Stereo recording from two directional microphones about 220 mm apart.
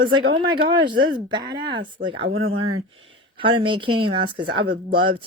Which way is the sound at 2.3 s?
70° right (ahead or behind).